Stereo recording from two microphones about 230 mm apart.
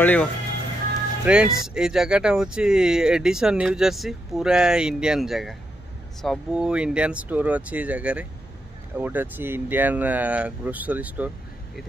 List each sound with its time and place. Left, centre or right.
0.0 s speech: centre
1.2 s speech: centre